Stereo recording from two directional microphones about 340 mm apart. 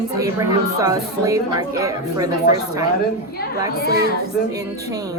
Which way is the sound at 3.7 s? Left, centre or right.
Left.